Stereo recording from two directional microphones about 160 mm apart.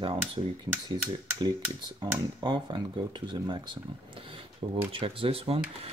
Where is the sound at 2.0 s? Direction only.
30° right (ahead or behind).